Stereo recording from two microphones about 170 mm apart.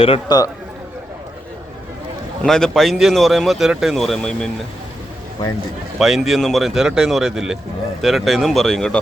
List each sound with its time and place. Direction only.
0.0 s a man's voice: 30° left (ahead or behind)
2.4 s speech: 5° left (ahead or behind)
6.0 s speech: centre (ahead or behind)